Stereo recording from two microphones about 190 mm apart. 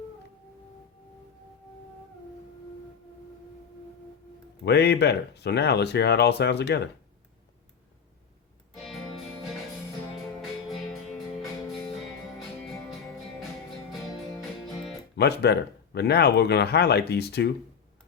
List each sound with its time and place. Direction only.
4.6 s speech: 60° left (ahead or behind)
8.7 s music: centre (ahead or behind)
10.7 s music: centre (ahead or behind)
15.1 s speech: 60° left (ahead or behind)